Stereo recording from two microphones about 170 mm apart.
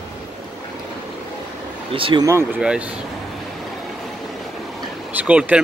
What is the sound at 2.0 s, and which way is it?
Speech, 30° right (ahead or behind).